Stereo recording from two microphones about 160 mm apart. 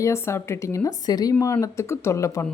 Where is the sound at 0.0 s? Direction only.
15° left (ahead or behind).